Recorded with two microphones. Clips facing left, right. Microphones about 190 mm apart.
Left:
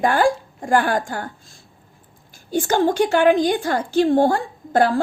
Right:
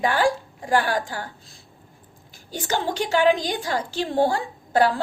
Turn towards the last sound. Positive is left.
turn(degrees=50)  # may be behind; listen again after turning